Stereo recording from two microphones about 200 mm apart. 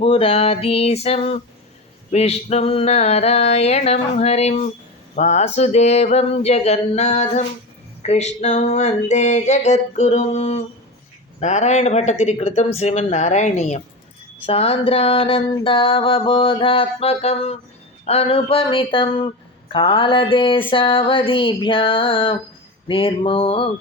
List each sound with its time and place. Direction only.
0.0 s speech: 30° left (ahead or behind)
2.0 s a sound: 30° left (ahead or behind)
14.4 s speech: 30° left (ahead or behind)